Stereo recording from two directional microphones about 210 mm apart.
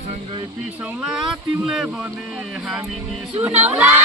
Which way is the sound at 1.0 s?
Centre (ahead or behind).